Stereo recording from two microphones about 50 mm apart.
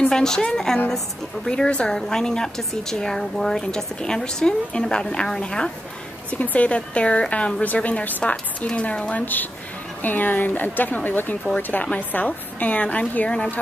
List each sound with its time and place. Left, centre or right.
0.1 s a woman's voice: centre
6.3 s a woman's voice: left
9.1 s a woman's voice: left